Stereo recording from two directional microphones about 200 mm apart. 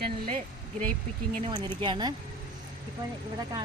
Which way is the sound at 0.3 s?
40° right (ahead or behind).